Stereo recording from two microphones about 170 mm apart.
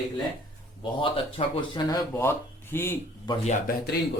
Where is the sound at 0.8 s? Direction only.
30° left (ahead or behind); by 3.0 s 15° left (ahead or behind).